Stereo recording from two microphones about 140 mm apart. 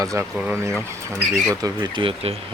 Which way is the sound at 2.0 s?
45° right (ahead or behind).